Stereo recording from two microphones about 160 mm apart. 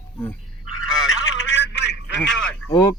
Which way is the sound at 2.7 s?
20° left (ahead or behind).